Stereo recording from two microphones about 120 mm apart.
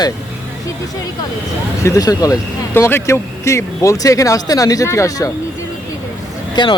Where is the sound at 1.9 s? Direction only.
30° left (ahead or behind).